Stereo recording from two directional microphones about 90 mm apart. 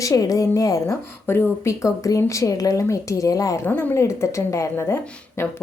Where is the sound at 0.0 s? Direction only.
40° left (ahead or behind).